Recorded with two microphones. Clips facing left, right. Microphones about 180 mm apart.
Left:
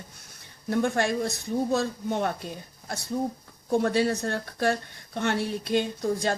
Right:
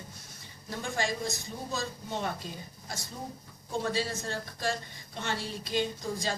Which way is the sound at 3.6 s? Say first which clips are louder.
Left 8 dB; 60° left (ahead or behind).